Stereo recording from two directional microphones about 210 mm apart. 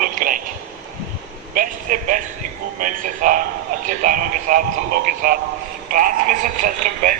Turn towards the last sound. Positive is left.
turn(degrees=-40)  # may be behind; listen again after turning